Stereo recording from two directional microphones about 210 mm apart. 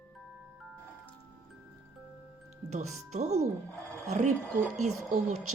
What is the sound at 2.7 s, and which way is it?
Speech, 35° right (ahead or behind).